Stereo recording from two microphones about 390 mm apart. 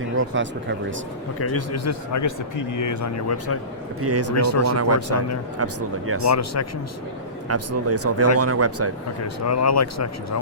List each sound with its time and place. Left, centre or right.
0.2 s speech: right
1.4 s a man's voice: left
4.0 s speech: right
4.4 s speech: left
4.7 s speech: right
6.3 s a man's voice: left
7.4 s speech: right
9.2 s speech: left